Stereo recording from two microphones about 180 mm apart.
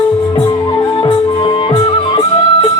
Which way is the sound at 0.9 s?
25° left (ahead or behind).